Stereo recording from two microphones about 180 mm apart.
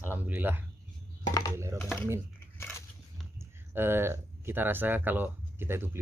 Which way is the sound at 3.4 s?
10° right (ahead or behind).